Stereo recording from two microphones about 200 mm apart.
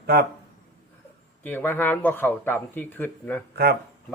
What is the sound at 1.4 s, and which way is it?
A man's voice, 10° left (ahead or behind).